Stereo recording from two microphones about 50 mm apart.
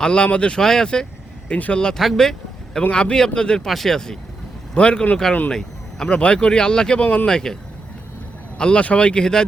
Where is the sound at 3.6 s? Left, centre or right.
Centre; by 5.1 s left.